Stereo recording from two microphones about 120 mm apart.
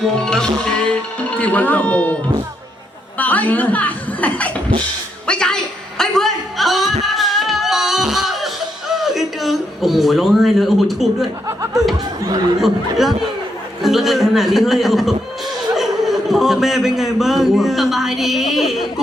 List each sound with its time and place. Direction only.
0.2 s a man's voice: 5° left (ahead or behind)
3.2 s a woman's voice: 15° left (ahead or behind)
5.2 s music: 5° left (ahead or behind)
8.9 s speech: centre (ahead or behind)
11.4 s speech: 25° right (ahead or behind)
12.6 s a man's voice: centre (ahead or behind)